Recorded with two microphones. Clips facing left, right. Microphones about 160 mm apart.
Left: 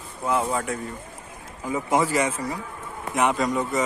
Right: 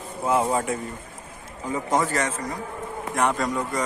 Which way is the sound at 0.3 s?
30° right (ahead or behind).